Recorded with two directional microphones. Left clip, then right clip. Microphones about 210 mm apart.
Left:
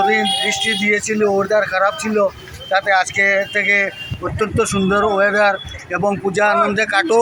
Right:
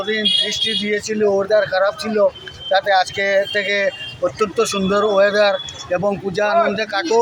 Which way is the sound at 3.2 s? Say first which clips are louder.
Left 2 dB; 15° right (ahead or behind).